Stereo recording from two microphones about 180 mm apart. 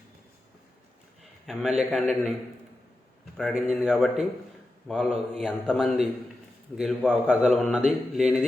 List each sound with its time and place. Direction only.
1.9 s a man's voice: centre (ahead or behind)
3.3 s a man's voice: centre (ahead or behind)